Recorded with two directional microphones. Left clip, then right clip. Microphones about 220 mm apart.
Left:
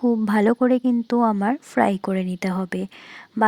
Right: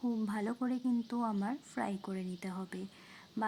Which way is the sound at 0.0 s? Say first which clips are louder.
Left 18 dB; 40° left (ahead or behind).